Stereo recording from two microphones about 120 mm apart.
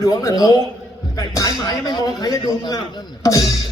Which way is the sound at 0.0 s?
30° left (ahead or behind).